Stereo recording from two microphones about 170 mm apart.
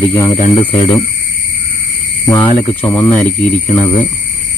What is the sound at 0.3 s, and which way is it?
Speech, 35° left (ahead or behind).